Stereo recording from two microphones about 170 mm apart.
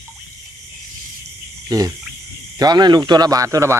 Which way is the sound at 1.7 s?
20° right (ahead or behind).